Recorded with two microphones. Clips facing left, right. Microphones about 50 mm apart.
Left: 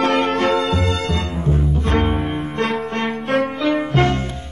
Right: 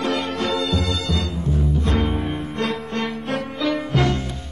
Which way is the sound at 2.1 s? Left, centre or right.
Centre.